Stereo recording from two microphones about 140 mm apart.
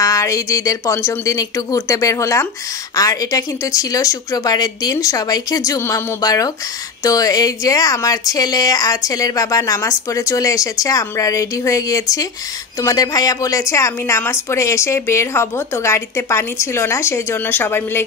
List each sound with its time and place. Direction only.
0.0 s speech: 25° left (ahead or behind)